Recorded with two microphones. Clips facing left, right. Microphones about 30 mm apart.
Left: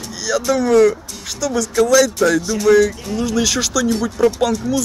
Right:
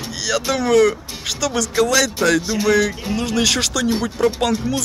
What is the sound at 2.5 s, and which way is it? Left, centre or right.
Speech, right.